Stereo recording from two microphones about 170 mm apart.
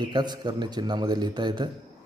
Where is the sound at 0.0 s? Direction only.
25° right (ahead or behind).